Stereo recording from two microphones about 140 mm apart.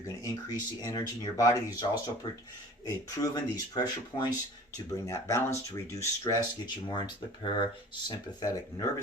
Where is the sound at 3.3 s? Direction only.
30° left (ahead or behind).